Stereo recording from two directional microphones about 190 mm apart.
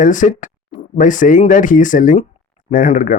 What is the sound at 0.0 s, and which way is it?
Speech, 45° left (ahead or behind).